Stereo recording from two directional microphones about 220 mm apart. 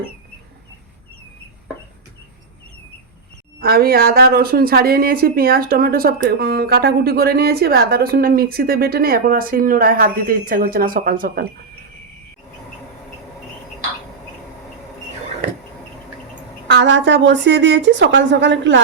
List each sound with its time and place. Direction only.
3.6 s a woman's voice: 45° right (ahead or behind)
16.6 s a woman's voice: 55° right (ahead or behind)